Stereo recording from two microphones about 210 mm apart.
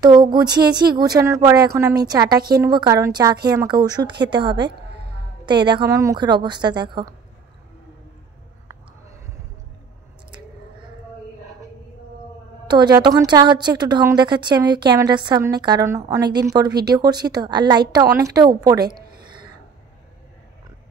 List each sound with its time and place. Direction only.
0.0 s a woman's voice: 20° right (ahead or behind)
12.6 s a woman's voice: 20° right (ahead or behind)